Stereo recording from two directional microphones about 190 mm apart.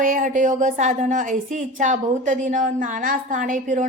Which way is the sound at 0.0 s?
45° right (ahead or behind).